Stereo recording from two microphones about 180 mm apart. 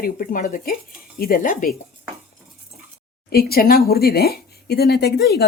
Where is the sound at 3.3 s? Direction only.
60° left (ahead or behind).